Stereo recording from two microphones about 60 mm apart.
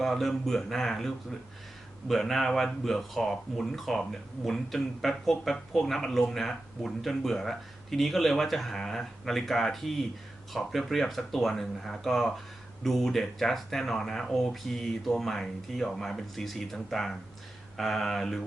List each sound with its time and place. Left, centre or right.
0.0 s speech: centre